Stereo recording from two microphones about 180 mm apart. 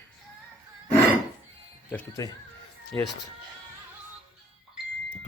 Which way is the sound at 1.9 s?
15° left (ahead or behind).